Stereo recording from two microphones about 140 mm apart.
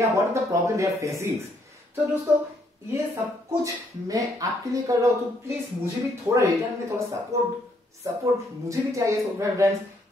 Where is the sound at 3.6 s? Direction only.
25° right (ahead or behind).